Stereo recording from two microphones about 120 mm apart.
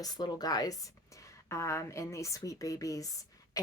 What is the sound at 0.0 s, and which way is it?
A woman's voice, 35° left (ahead or behind).